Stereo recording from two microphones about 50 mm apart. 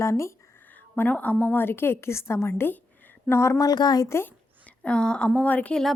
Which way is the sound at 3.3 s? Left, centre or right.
Left.